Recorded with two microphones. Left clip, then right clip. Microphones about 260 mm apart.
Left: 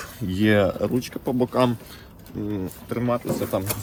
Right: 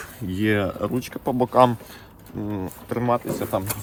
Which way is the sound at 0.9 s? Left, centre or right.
Right.